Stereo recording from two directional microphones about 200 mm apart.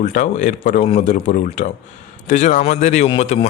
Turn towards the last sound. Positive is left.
turn(degrees=30)  # may be behind; listen again after turning